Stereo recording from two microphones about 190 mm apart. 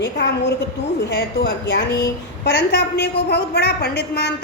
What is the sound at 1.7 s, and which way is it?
A woman's voice, 65° left (ahead or behind).